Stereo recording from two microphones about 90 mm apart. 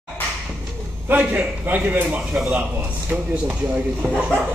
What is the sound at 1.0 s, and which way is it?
A man's voice, 20° right (ahead or behind).